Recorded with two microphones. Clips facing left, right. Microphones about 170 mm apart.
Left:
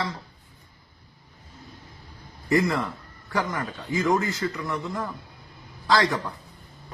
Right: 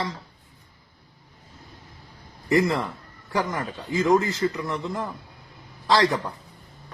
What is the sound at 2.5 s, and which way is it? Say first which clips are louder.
A man's voice: right 1 dB; 20° right (ahead or behind).